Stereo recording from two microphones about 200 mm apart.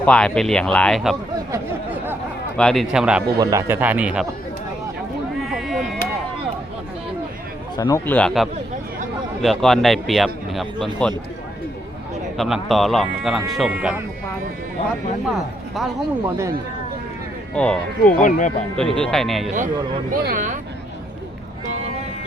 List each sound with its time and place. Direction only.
0.0 s a man's voice: 5° left (ahead or behind)
2.6 s a man's voice: centre (ahead or behind)
3.3 s speech: 15° right (ahead or behind)
5.5 s a sound: centre (ahead or behind)
7.8 s a man's voice: 15° left (ahead or behind); by 10.8 s centre (ahead or behind)
12.4 s a man's voice: centre (ahead or behind)
15.3 s a man's voice: centre (ahead or behind)
17.5 s speech: 5° left (ahead or behind)
18.2 s speech: 40° left (ahead or behind)
18.8 s a man's voice: 5° left (ahead or behind)
20.1 s speech: 45° right (ahead or behind)